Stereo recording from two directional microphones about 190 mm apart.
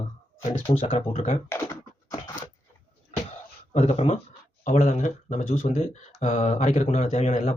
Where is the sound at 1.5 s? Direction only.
15° left (ahead or behind).